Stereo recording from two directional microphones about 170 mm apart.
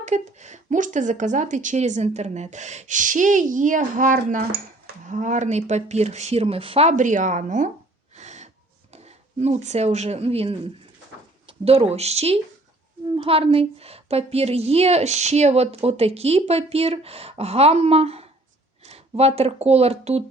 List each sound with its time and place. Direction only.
0.0 s speech: 45° right (ahead or behind)
8.1 s wheeze: 45° right (ahead or behind)
8.9 s a woman's voice: 40° right (ahead or behind)